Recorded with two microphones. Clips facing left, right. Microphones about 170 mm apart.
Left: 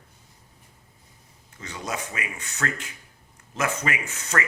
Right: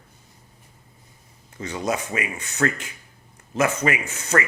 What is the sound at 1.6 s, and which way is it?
A man's voice, 15° right (ahead or behind).